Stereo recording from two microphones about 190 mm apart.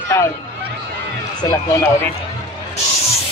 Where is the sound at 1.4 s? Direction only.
15° left (ahead or behind).